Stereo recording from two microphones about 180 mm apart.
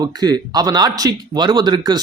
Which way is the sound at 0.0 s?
20° right (ahead or behind).